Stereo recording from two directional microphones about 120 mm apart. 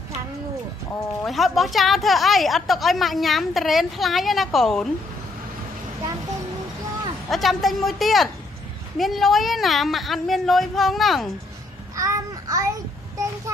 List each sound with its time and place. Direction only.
1.2 s a woman's voice: centre (ahead or behind)
7.2 s a woman's voice: centre (ahead or behind)
12.0 s babbling: 30° right (ahead or behind)